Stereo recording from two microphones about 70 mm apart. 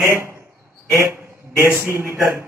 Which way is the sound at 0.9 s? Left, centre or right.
Right.